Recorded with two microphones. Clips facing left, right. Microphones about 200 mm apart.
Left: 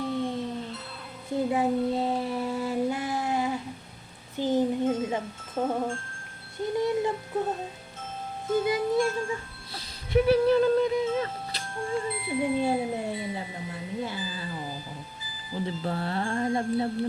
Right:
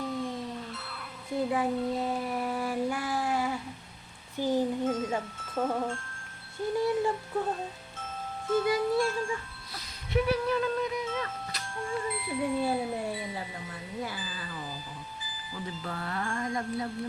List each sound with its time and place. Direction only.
0.1 s a sound: 30° left (ahead or behind)
1.5 s child singing: 25° left (ahead or behind)
4.4 s music: 20° left (ahead or behind)
6.7 s a sound: 20° left (ahead or behind)
8.4 s music: 20° left (ahead or behind)
15.5 s speech: 30° left (ahead or behind)